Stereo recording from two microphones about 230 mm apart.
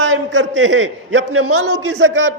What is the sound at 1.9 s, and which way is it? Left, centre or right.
Speech, right.